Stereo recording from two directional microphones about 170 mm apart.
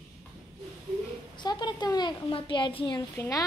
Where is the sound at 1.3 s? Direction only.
25° left (ahead or behind).